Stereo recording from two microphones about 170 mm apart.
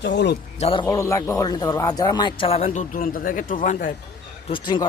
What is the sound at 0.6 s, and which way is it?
Speech, 30° left (ahead or behind).